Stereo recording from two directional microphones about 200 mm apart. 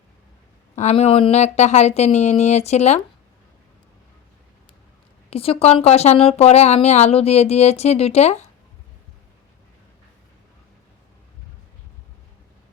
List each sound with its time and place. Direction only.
0.8 s speech: 35° left (ahead or behind)
5.3 s speech: 30° left (ahead or behind)